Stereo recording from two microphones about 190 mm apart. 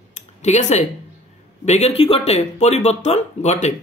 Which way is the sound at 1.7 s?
35° left (ahead or behind).